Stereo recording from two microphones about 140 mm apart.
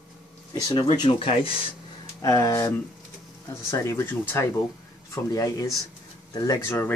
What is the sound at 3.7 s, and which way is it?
Speech, 20° left (ahead or behind).